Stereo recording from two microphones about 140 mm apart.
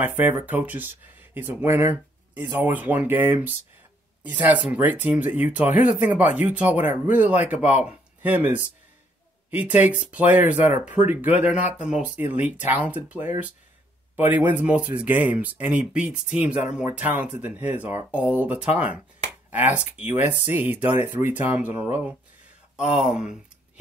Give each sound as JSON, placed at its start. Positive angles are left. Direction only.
{"t": 0.0, "sound": "speech", "side_deg": -15}
{"t": 7.5, "sound": "speech", "side_deg": 55}
{"t": 7.8, "sound": "speech", "side_deg": -10}